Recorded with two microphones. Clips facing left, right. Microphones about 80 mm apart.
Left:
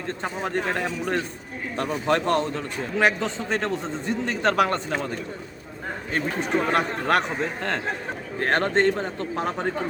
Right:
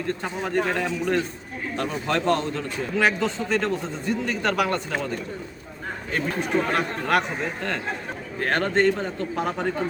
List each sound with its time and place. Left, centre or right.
0.5 s a man's voice: left
6.1 s a man's voice: left
8.4 s a man's voice: left
8.7 s a man's voice: left